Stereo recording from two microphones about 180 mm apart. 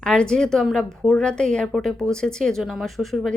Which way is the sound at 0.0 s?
5° left (ahead or behind).